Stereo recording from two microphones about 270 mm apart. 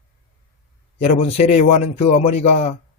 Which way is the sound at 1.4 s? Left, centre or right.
Left.